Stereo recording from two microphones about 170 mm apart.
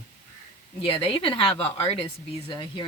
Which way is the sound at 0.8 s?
30° left (ahead or behind).